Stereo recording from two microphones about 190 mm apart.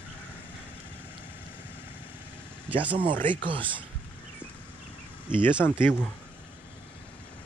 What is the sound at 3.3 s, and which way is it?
Speech, 25° right (ahead or behind).